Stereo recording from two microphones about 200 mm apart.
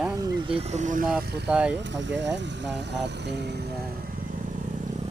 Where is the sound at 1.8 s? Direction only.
65° right (ahead or behind).